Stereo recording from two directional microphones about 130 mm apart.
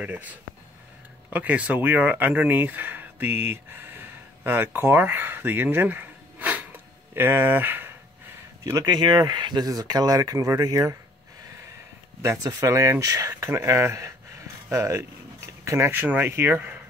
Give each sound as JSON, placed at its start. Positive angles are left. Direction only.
{"t": 0.0, "sound": "speech", "side_deg": -10}
{"t": 8.6, "sound": "speech", "side_deg": -25}
{"t": 12.2, "sound": "speech", "side_deg": -25}